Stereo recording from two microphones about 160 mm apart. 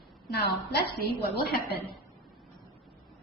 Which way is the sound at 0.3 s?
90° left.